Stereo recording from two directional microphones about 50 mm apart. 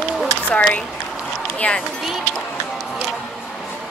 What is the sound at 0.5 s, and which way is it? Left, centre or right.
Speech, left.